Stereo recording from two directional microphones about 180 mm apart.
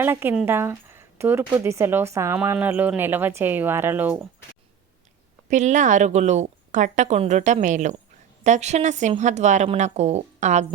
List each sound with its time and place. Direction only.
0.0 s speech: 10° right (ahead or behind)
5.5 s speech: 40° right (ahead or behind)